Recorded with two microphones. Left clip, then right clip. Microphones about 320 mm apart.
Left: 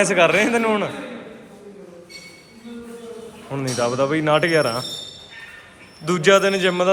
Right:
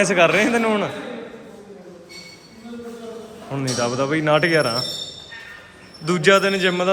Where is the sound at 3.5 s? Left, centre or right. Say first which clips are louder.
Left 1 dB; centre.